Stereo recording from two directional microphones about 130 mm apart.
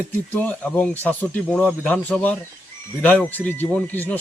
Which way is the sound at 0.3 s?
15° left (ahead or behind).